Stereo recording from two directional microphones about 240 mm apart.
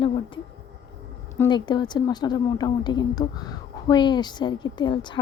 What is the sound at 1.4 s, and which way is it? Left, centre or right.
Speech, centre.